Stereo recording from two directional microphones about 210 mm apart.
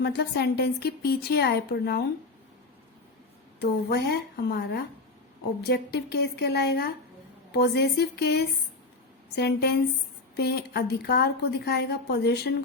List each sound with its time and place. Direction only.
0.0 s a woman's voice: 50° left (ahead or behind)
3.6 s a woman's voice: 50° left (ahead or behind)